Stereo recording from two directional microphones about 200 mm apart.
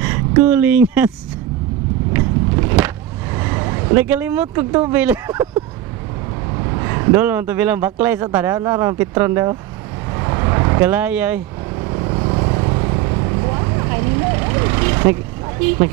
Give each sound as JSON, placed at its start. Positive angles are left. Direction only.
{"t": 0.0, "sound": "speech", "side_deg": -15}
{"t": 2.1, "sound": "vehicle", "side_deg": -10}
{"t": 3.3, "sound": "speech", "side_deg": -15}
{"t": 6.5, "sound": "speech", "side_deg": -20}
{"t": 10.1, "sound": "vehicle", "side_deg": -20}
{"t": 11.8, "sound": "vehicle", "side_deg": -25}